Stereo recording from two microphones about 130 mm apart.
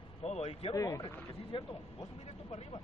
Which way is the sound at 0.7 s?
25° left (ahead or behind).